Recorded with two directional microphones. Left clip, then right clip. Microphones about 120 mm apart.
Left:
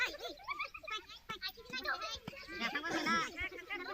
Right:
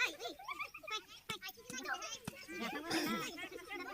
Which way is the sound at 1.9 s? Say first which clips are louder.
Left 3 dB; 25° left (ahead or behind).